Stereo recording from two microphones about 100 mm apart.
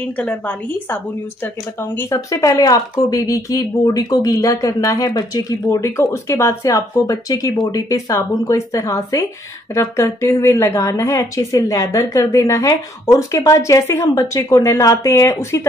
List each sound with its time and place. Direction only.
0.0 s a woman's voice: 15° left (ahead or behind)